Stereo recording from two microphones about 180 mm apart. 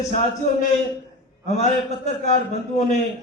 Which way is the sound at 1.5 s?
40° left (ahead or behind).